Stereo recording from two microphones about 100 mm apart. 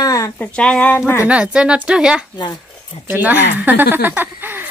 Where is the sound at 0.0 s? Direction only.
35° left (ahead or behind).